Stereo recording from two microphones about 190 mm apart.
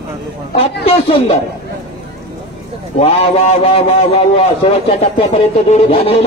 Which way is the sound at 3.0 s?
30° left (ahead or behind).